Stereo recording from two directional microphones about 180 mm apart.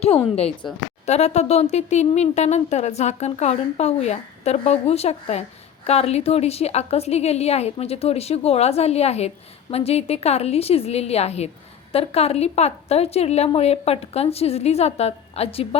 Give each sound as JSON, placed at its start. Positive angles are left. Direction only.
{"t": 0.3, "sound": "speech", "side_deg": 35}